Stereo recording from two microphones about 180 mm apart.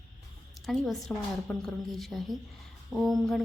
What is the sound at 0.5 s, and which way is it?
A woman's voice, centre (ahead or behind).